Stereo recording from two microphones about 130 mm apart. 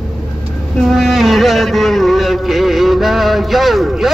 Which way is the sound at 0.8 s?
Centre (ahead or behind).